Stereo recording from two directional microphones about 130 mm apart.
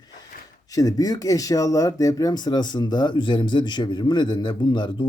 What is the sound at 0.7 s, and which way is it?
Speech, 30° left (ahead or behind).